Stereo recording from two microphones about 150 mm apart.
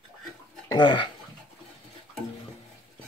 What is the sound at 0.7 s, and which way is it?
Speech, 30° left (ahead or behind).